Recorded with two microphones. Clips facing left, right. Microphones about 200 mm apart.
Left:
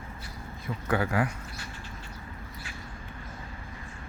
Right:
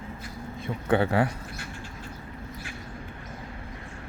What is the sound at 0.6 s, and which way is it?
Speech, 30° right (ahead or behind).